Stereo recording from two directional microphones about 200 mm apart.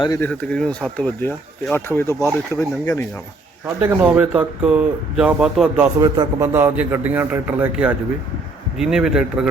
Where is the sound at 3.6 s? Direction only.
10° right (ahead or behind).